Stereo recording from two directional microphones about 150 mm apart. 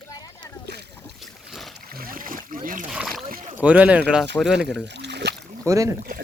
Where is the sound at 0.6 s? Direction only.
90° right.